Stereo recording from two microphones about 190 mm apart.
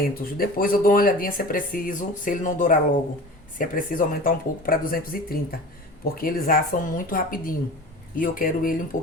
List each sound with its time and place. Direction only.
0.1 s speech: 50° left (ahead or behind)